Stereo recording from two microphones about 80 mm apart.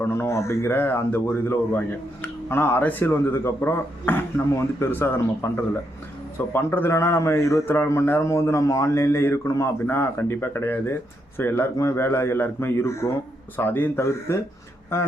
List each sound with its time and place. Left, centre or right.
0.0 s speech: left
6.5 s a man's voice: left
13.6 s speech: left